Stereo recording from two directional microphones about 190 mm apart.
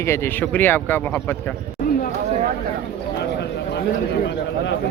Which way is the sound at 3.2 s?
65° left (ahead or behind).